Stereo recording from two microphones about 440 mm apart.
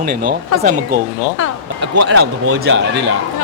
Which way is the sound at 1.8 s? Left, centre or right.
Right.